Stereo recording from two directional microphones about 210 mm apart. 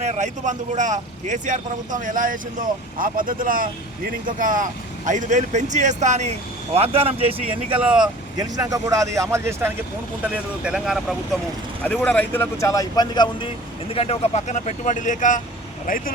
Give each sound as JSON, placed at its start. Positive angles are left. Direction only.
{"t": 0.0, "sound": "speech", "side_deg": -35}
{"t": 8.4, "sound": "speech", "side_deg": -15}